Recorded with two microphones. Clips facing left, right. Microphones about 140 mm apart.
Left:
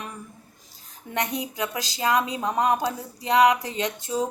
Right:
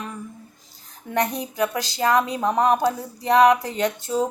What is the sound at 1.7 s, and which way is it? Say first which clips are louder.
Speech: right 2 dB; 20° left (ahead or behind).